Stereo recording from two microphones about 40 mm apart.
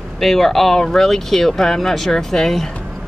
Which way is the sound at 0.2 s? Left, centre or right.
Centre.